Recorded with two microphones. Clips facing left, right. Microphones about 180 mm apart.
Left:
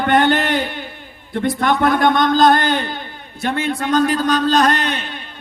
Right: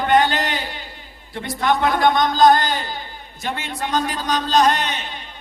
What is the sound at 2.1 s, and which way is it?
A man's voice, 60° left (ahead or behind).